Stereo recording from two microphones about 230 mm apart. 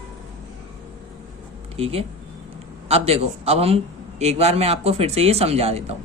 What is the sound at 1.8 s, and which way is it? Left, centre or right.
A man's voice, right.